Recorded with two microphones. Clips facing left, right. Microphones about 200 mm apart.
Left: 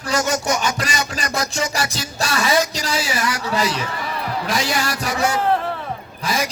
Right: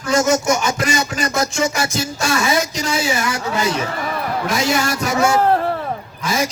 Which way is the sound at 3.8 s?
50° right (ahead or behind).